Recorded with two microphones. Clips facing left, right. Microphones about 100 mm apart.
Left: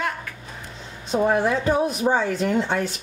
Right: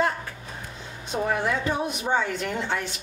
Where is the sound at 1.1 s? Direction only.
30° left (ahead or behind).